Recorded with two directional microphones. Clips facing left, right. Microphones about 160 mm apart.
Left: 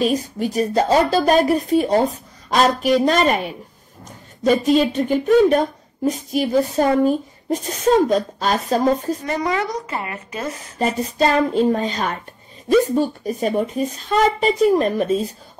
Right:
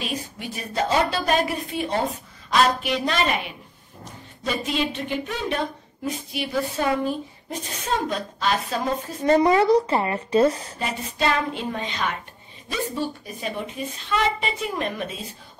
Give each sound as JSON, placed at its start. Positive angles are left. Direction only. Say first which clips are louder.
{"t": 0.0, "sound": "speech", "louder": "left 11 dB", "side_deg": 40}
{"t": 9.2, "sound": "a woman's voice", "louder": "right 5 dB", "side_deg": -25}
{"t": 10.8, "sound": "speech", "louder": "left 9 dB", "side_deg": 35}